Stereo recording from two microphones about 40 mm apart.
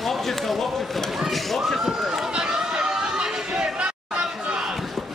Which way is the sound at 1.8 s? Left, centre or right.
Centre.